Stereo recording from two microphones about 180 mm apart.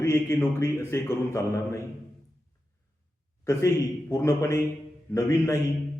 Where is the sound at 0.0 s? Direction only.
15° left (ahead or behind).